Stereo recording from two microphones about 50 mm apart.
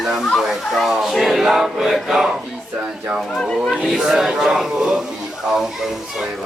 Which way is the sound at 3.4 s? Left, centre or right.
Centre.